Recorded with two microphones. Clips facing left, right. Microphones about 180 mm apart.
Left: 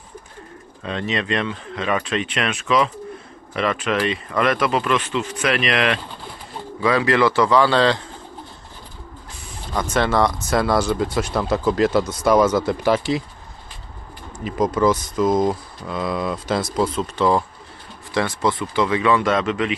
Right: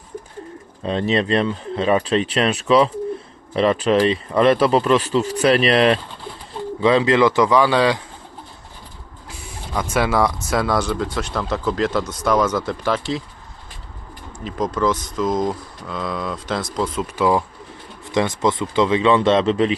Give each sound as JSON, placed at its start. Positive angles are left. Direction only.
{"t": 0.8, "sound": "a man's voice", "side_deg": -35}
{"t": 9.7, "sound": "speech", "side_deg": -5}
{"t": 14.4, "sound": "speech", "side_deg": 5}
{"t": 18.1, "sound": "speech", "side_deg": -20}